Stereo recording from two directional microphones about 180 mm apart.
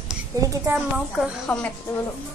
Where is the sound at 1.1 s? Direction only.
Centre (ahead or behind).